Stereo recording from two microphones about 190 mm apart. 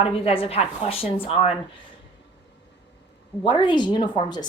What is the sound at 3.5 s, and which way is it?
A woman's voice, 25° left (ahead or behind).